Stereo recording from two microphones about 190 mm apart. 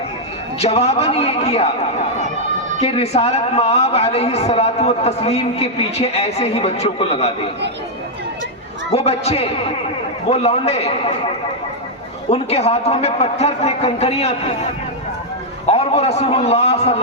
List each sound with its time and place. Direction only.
0.6 s a man's voice: 35° left (ahead or behind)
2.8 s a man's voice: 35° left (ahead or behind)
8.9 s a man's voice: 35° left (ahead or behind)
12.3 s a man's voice: 35° left (ahead or behind)
15.6 s a man's voice: 35° left (ahead or behind)